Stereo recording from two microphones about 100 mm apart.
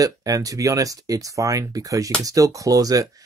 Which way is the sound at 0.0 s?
35° right (ahead or behind).